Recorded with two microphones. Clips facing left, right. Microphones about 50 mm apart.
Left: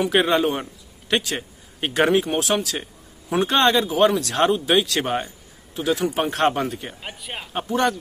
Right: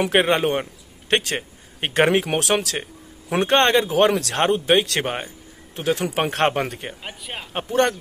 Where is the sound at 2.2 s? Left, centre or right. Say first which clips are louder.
Even; right.